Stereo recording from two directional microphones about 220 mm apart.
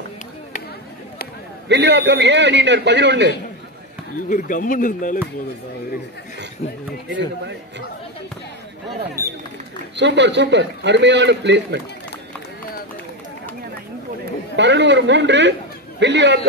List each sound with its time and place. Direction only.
1.7 s a man's voice: 50° right (ahead or behind)
4.3 s speech: 35° left (ahead or behind)
7.1 s a man's voice: 55° right (ahead or behind)
9.2 s speech: 15° right (ahead or behind)
9.9 s a man's voice: 55° right (ahead or behind)
14.6 s a man's voice: 55° right (ahead or behind)